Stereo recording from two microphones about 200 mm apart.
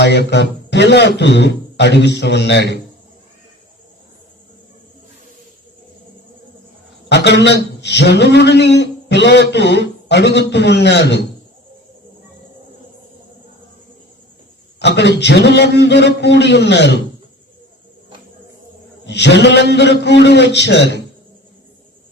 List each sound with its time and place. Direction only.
0.0 s a man's voice: 55° left (ahead or behind)
7.1 s a man's voice: 60° left (ahead or behind)
14.8 s a man's voice: 60° left (ahead or behind)
19.0 s a man's voice: 60° left (ahead or behind)